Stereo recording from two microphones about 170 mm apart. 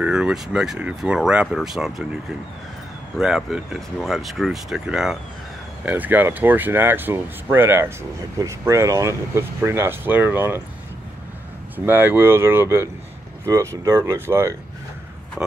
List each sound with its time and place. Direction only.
0.0 s speech: 5° right (ahead or behind)
3.2 s speech: centre (ahead or behind)
11.7 s speech: 10° right (ahead or behind)